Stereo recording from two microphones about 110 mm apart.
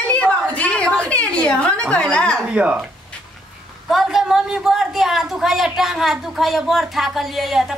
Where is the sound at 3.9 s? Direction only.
5° right (ahead or behind).